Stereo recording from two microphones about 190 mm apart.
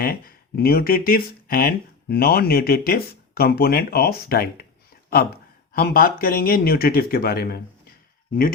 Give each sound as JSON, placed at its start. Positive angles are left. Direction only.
{"t": 0.0, "sound": "speech", "side_deg": 50}
{"t": 5.7, "sound": "speech", "side_deg": 50}